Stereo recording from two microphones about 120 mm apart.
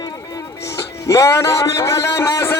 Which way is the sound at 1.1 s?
25° left (ahead or behind).